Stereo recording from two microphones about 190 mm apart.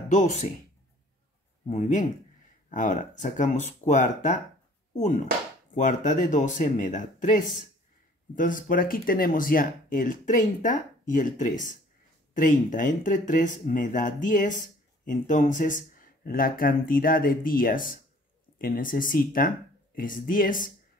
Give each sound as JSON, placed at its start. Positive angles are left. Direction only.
{"t": 0.1, "sound": "speech", "side_deg": 40}
{"t": 1.7, "sound": "speech", "side_deg": 40}